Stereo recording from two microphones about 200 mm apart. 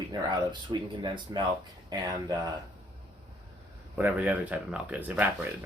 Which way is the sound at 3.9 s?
10° right (ahead or behind).